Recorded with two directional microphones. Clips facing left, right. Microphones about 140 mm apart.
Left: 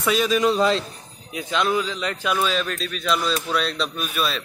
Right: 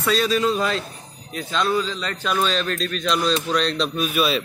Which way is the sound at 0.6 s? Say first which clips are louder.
Left 4 dB; 25° left (ahead or behind).